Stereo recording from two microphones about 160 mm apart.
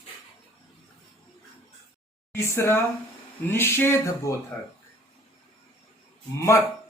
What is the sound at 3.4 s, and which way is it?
Speech, 15° left (ahead or behind).